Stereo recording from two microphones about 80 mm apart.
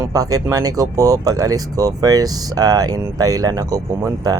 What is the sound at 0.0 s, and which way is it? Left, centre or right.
Speech, right.